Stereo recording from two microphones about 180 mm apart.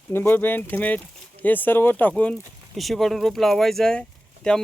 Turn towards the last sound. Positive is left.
turn(degrees=5)  # may be behind; listen again after turning